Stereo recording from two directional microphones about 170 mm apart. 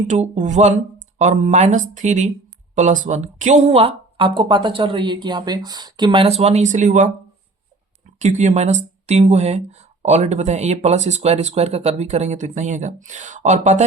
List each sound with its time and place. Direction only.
0.1 s speech: 45° right (ahead or behind)
8.2 s speech: 40° right (ahead or behind)